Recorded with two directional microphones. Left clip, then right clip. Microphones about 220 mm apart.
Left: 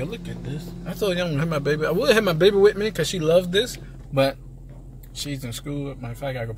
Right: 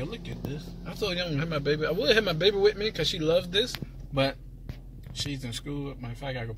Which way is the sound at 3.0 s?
15° left (ahead or behind).